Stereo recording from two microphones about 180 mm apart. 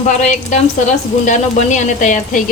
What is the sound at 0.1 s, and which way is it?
A woman's voice, 40° left (ahead or behind).